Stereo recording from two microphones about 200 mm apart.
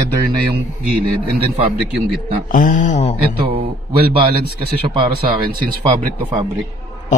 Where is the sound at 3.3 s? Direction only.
30° right (ahead or behind).